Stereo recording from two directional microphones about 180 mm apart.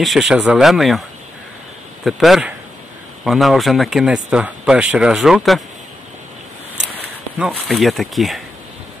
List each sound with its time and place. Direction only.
0.0 s speech: centre (ahead or behind)
2.0 s speech: centre (ahead or behind)
7.3 s speech: centre (ahead or behind)